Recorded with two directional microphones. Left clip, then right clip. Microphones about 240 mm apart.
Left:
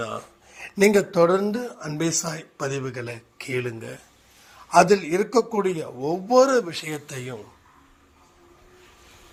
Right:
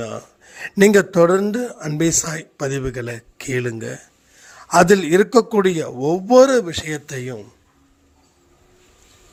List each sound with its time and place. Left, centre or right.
0.0 s a man's voice: right